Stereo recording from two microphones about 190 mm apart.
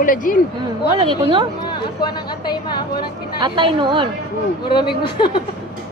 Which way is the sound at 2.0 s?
20° left (ahead or behind).